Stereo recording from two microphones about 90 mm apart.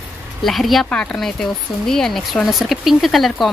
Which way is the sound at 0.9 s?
15° left (ahead or behind).